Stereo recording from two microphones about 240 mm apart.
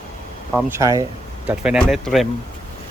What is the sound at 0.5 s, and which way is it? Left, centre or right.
Speech, centre.